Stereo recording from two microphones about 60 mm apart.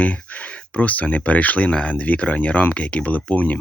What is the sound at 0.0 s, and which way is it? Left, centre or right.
Speech, left.